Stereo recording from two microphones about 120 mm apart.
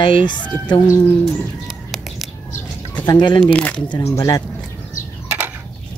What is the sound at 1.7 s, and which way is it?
Bird, centre (ahead or behind).